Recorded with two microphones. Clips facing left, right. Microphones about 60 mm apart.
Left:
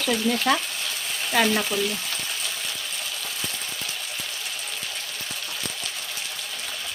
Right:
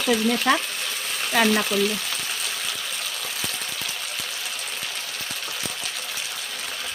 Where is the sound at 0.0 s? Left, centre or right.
Centre.